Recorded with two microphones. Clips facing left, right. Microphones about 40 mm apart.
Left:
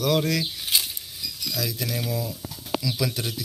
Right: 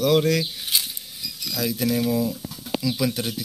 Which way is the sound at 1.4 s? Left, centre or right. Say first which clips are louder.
Right 5 dB; right.